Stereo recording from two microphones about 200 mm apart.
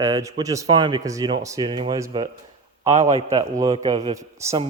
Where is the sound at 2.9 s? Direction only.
35° right (ahead or behind); by 4.6 s 15° right (ahead or behind).